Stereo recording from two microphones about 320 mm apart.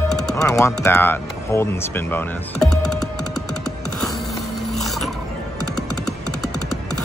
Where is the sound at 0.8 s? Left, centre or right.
Centre.